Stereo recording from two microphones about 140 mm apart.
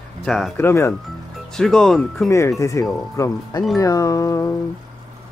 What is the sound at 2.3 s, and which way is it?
Speech, 20° left (ahead or behind).